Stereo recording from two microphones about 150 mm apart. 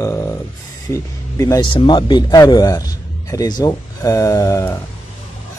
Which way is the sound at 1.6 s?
35° left (ahead or behind).